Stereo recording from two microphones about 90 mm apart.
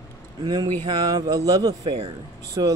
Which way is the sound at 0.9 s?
55° right (ahead or behind).